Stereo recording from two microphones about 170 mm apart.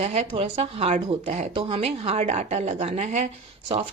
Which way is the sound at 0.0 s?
40° right (ahead or behind).